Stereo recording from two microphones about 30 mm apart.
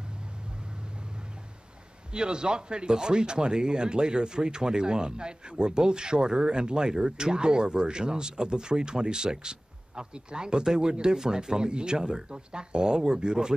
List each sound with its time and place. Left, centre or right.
2.1 s speech: right